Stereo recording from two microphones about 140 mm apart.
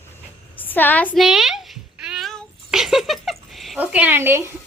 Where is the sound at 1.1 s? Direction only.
Centre (ahead or behind).